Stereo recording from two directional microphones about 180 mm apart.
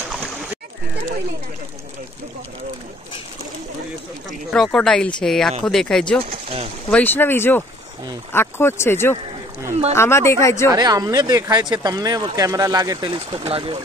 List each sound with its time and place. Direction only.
4.3 s speech: centre (ahead or behind)
6.3 s a sound: 35° right (ahead or behind)
6.9 s speech: 10° left (ahead or behind)
10.7 s speech: 20° right (ahead or behind)